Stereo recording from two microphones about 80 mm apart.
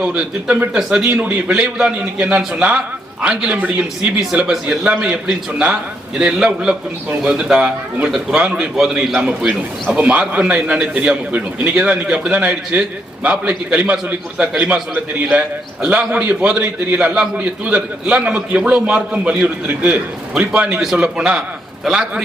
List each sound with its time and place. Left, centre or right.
0.0 s a man's voice: centre
1.0 s a man's voice: right
1.5 s a man's voice: centre